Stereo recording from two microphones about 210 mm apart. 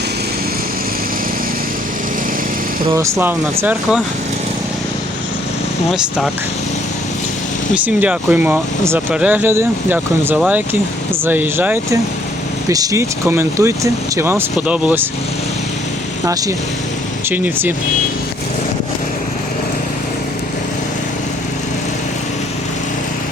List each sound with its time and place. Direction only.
2.8 s speech: 15° right (ahead or behind)
5.9 s speech: centre (ahead or behind)
7.9 s speech: 5° right (ahead or behind)
16.2 s speech: 15° right (ahead or behind)